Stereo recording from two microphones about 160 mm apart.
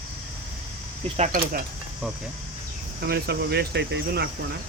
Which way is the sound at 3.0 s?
85° right.